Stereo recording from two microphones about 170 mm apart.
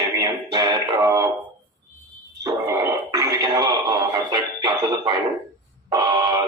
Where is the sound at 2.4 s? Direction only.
20° right (ahead or behind).